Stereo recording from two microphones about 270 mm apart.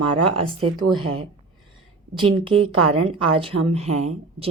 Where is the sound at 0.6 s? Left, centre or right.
Right.